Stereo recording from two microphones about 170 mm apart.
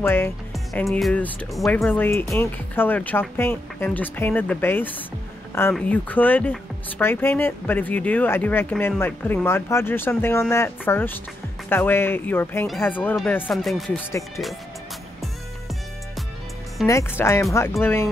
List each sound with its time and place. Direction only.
0.0 s speech: 15° left (ahead or behind)
0.7 s speech: centre (ahead or behind)
16.8 s speech: 15° left (ahead or behind)